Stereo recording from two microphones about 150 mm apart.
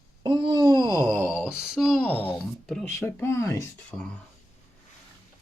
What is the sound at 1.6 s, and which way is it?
Speech, centre (ahead or behind).